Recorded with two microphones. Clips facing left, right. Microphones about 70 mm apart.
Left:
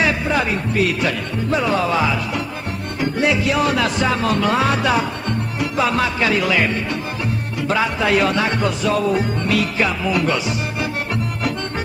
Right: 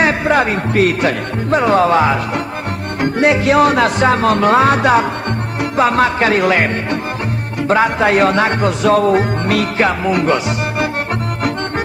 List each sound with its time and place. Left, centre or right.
0.0 s music: right